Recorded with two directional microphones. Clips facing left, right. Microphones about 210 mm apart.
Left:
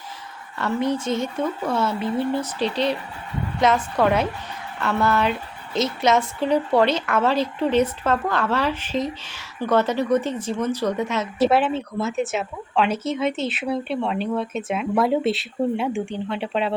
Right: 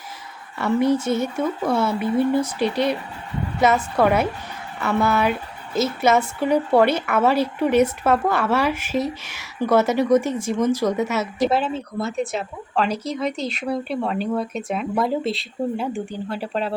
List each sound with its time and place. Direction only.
0.6 s a woman's voice: 10° right (ahead or behind)
11.3 s speech: 5° left (ahead or behind)